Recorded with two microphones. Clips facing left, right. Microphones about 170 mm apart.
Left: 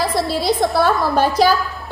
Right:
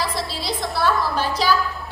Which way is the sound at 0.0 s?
50° left (ahead or behind).